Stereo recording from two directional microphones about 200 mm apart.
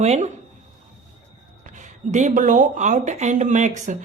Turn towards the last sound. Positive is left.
turn(degrees=-35)  # may be behind; listen again after turning